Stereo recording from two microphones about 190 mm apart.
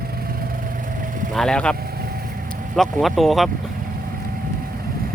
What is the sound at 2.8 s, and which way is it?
Speech, centre (ahead or behind).